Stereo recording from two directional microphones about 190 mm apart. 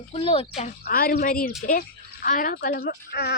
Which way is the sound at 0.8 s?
50° left (ahead or behind).